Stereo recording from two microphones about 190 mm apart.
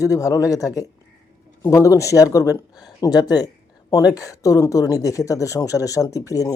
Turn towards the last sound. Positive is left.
turn(degrees=20)  # may be behind; listen again after turning